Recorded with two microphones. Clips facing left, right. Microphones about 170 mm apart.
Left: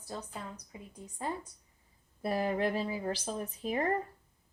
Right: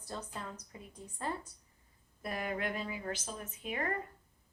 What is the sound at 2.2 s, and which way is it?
A woman's voice, 30° left (ahead or behind).